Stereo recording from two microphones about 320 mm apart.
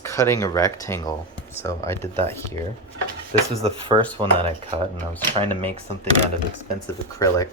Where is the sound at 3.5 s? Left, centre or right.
Centre.